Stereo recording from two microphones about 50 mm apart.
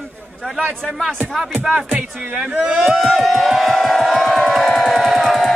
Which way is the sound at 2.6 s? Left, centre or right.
Centre.